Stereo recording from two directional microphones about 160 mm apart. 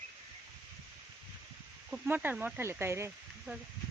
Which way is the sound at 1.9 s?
10° right (ahead or behind).